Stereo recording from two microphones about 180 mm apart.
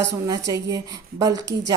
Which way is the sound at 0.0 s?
20° right (ahead or behind).